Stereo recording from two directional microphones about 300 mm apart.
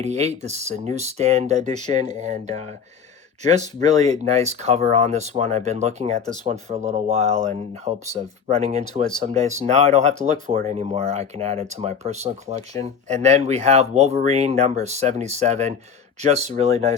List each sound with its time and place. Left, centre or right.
0.0 s speech: right